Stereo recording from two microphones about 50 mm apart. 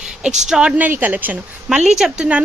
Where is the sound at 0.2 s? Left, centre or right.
Centre.